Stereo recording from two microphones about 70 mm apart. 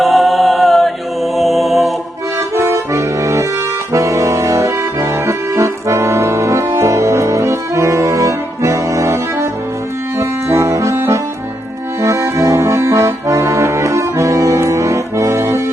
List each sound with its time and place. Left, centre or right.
0.0 s mantra: centre
2.6 s accordion: right
3.9 s brass instrument: right
12.0 s accordion: right